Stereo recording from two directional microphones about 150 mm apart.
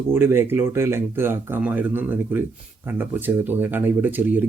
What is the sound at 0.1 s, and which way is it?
Speech, 15° right (ahead or behind).